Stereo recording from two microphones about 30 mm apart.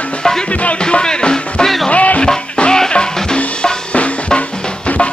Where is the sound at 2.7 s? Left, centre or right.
Left.